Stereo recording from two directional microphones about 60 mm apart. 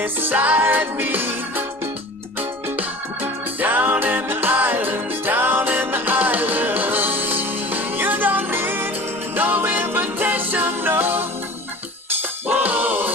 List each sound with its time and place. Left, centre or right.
0.0 s music: right
12.5 s music: right